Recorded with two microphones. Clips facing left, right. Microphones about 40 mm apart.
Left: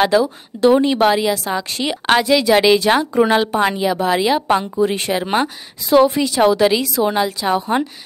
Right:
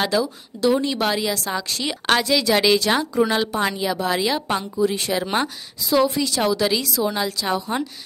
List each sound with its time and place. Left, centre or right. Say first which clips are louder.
0.0 s a woman's voice: left 7 dB; left
0.6 s a woman's voice: left 7 dB; left
1.0 s a woman's voice: left 7 dB; centre
4.7 s a woman's voice: left 4 dB; left
5.1 s a woman's voice: left 4 dB; centre
5.9 s a woman's voice: left 6 dB; left; by 7.5 s centre
7.5 s a woman's voice: left 9 dB; left